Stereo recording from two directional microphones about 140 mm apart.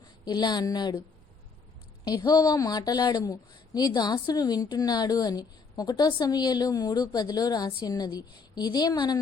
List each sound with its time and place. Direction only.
0.3 s a woman's voice: 30° left (ahead or behind)
2.0 s a woman's voice: 30° left (ahead or behind)